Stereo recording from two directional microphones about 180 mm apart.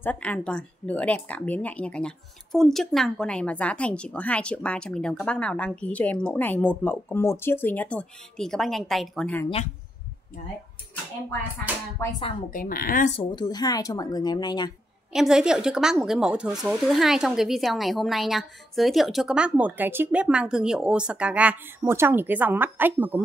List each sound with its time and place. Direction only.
0.0 s speech: 10° left (ahead or behind)
12.0 s speech: 15° left (ahead or behind)
12.4 s speech: 50° left (ahead or behind)
13.1 s a woman's voice: 25° left (ahead or behind)
15.1 s speech: 5° right (ahead or behind)